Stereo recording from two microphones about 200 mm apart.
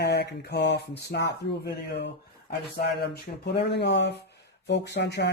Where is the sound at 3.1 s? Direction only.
60° left (ahead or behind).